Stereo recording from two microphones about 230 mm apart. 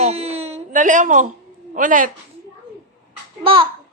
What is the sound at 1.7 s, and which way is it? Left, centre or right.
Speech, right.